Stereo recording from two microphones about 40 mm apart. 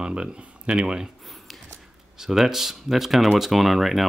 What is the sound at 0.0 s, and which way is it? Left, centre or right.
Speech, right.